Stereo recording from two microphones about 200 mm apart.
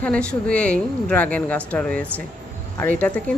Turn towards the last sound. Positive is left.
turn(degrees=10)  # may be behind; listen again after turning